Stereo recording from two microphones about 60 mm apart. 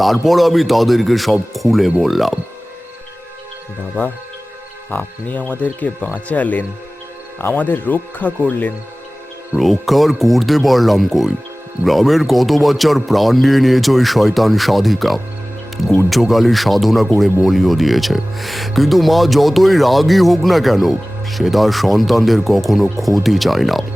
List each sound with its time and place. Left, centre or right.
0.0 s speech: centre
4.9 s speech: left
9.6 s speech: centre